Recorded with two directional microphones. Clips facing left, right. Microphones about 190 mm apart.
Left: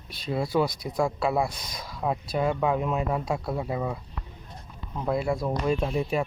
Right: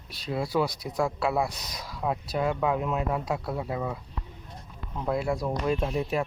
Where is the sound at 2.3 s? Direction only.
5° right (ahead or behind).